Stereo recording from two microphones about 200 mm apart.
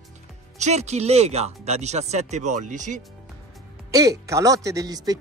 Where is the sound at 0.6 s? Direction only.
35° right (ahead or behind).